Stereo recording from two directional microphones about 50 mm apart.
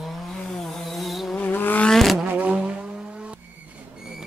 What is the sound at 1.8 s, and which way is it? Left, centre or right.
Vehicle, centre.